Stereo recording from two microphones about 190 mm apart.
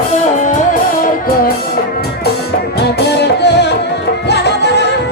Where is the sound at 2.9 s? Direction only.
60° left (ahead or behind).